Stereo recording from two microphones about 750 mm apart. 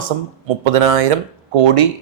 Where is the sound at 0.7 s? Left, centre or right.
Right.